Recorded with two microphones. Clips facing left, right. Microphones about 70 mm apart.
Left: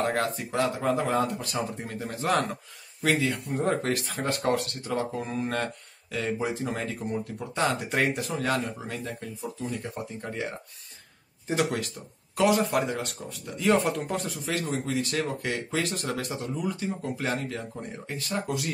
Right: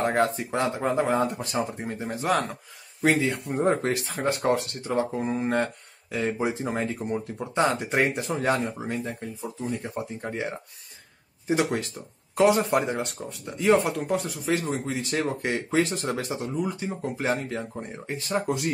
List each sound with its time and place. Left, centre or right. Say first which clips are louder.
0.0 s speech: right 3 dB; centre
4.0 s speech: right 3 dB; centre
4.3 s speech: right 3 dB; centre
11.4 s speech: right 3 dB; centre
12.4 s speech: right 3 dB; right
13.8 s speech: right 2 dB; centre
14.4 s speech: right 3 dB; centre